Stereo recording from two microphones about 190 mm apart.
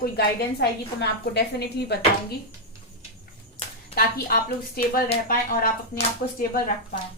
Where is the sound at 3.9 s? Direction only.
50° left (ahead or behind).